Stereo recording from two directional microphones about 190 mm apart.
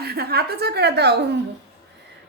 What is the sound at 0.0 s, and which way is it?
A woman's voice, 55° right (ahead or behind).